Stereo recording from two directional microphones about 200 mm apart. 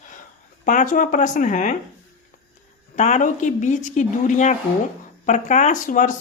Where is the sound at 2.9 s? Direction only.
35° left (ahead or behind).